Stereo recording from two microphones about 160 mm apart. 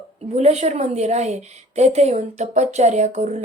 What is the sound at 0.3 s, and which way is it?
Speech, 45° right (ahead or behind).